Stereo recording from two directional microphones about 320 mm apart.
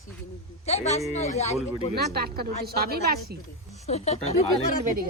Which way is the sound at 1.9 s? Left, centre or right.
Right.